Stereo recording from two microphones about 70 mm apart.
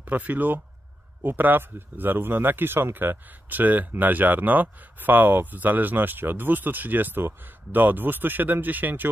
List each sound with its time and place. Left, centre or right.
0.0 s speech: right